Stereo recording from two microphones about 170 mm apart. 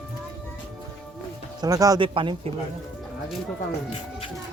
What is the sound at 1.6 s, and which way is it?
Speech, 20° right (ahead or behind).